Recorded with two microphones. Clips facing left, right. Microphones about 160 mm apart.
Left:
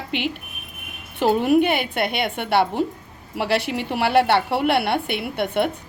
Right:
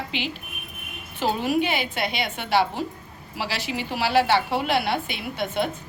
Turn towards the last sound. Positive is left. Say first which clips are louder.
# left 4 dB
turn(degrees=65)  # may be behind; listen again after turning